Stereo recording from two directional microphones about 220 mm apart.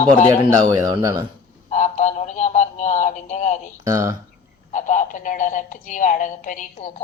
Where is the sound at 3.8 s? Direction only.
15° right (ahead or behind).